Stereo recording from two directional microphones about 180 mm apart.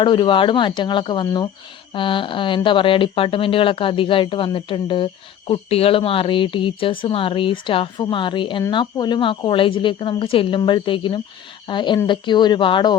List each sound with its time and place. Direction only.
0.0 s speech: 25° left (ahead or behind)